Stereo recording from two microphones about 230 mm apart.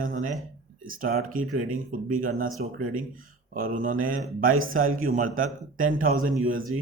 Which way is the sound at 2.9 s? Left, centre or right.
Right.